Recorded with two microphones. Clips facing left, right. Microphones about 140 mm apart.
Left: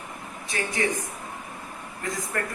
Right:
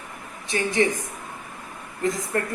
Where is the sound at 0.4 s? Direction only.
20° right (ahead or behind).